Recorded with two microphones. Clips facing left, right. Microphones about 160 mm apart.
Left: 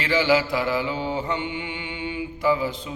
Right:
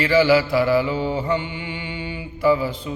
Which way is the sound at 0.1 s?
20° left (ahead or behind).